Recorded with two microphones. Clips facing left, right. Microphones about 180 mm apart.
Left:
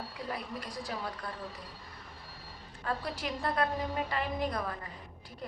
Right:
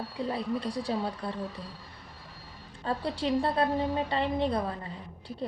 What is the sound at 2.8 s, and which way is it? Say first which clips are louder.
A woman's voice: right 5 dB; 30° right (ahead or behind).